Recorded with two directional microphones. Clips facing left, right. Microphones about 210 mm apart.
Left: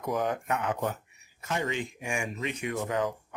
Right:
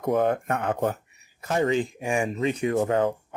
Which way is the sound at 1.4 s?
40° right (ahead or behind).